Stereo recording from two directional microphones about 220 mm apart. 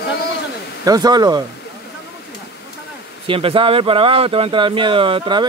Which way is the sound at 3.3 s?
25° right (ahead or behind).